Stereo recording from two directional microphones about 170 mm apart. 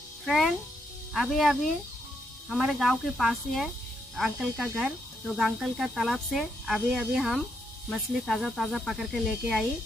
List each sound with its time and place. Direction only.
0.3 s speech: centre (ahead or behind)